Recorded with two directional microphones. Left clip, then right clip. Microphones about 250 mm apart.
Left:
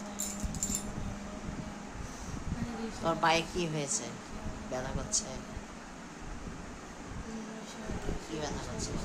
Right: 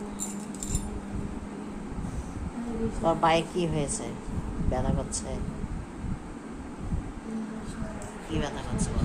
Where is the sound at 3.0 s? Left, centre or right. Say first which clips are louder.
Right 5 dB; centre.